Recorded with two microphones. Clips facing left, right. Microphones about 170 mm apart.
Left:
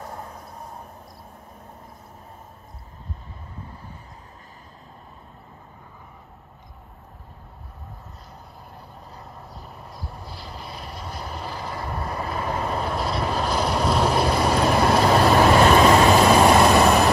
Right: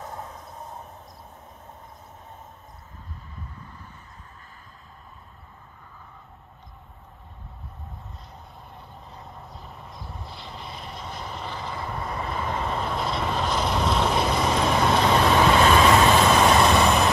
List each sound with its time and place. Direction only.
9.1 s vehicle: centre (ahead or behind)
15.6 s vehicle: 40° left (ahead or behind)
16.4 s vehicle: 5° left (ahead or behind)